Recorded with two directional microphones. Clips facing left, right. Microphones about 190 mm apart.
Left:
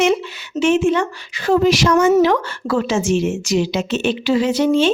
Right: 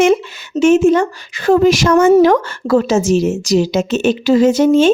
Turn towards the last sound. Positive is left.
turn(degrees=-45)  # may be behind; listen again after turning